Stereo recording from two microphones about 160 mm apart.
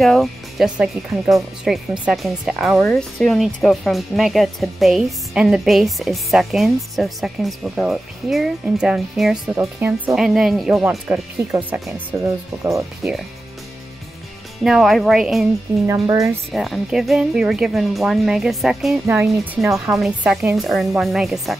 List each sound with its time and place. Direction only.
0.0 s speech: centre (ahead or behind)
11.1 s speech: 10° right (ahead or behind)
14.6 s speech: centre (ahead or behind)
15.9 s speech: 20° right (ahead or behind)
16.5 s speech: centre (ahead or behind)
19.0 s speech: 15° right (ahead or behind)
19.7 s speech: centre (ahead or behind)